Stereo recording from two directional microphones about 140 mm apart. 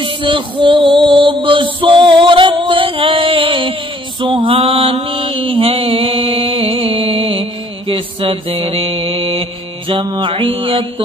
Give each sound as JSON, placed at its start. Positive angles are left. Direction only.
{"t": 0.0, "sound": "music", "side_deg": -40}
{"t": 4.2, "sound": "mantra", "side_deg": -35}